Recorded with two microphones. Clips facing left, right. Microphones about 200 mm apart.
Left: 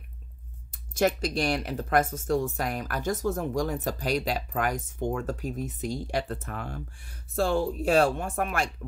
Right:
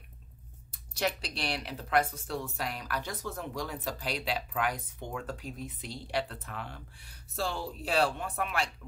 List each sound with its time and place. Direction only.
0.7 s speech: 45° left (ahead or behind)